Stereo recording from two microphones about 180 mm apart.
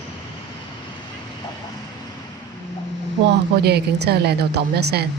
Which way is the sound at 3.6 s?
65° right (ahead or behind).